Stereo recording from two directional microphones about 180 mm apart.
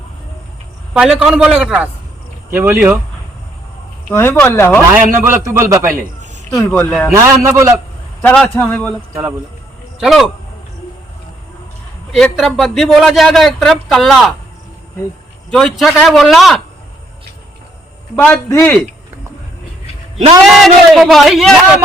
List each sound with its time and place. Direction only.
0.9 s a man's voice: 5° right (ahead or behind)
4.1 s a man's voice: 15° left (ahead or behind)
4.9 s a man's voice: 15° right (ahead or behind)
6.5 s a man's voice: 10° left (ahead or behind)
7.1 s a man's voice: 15° right (ahead or behind)
8.2 s a man's voice: 5° left (ahead or behind)
10.0 s a man's voice: centre (ahead or behind)
12.1 s a man's voice: centre (ahead or behind)
15.4 s a man's voice: centre (ahead or behind)
18.2 s a man's voice: 15° left (ahead or behind)
20.4 s a man's voice: centre (ahead or behind)